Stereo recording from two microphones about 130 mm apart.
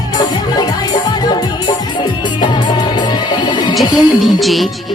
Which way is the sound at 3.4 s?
35° left (ahead or behind).